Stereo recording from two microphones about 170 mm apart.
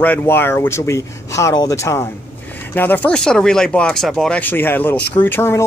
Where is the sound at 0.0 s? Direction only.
10° left (ahead or behind).